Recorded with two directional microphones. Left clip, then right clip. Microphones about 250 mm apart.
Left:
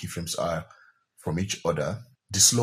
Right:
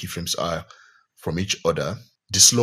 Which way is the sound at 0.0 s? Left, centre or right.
Right.